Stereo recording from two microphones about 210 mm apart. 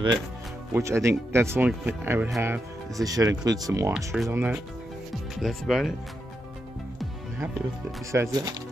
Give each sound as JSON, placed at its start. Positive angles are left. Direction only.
{"t": 0.7, "sound": "speech", "side_deg": -15}
{"t": 3.9, "sound": "speech", "side_deg": 0}
{"t": 8.1, "sound": "speech", "side_deg": -15}